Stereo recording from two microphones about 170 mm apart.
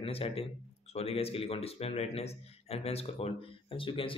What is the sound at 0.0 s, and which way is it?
Speech, 35° left (ahead or behind).